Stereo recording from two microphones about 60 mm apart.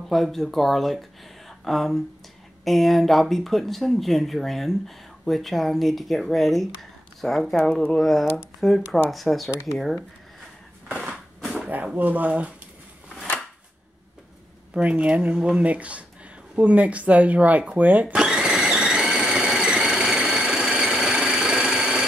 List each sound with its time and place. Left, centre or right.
0.1 s speech: centre
7.6 s speech: centre
8.0 s speech: centre
11.7 s speech: right
14.8 s speech: right
18.1 s a sound: centre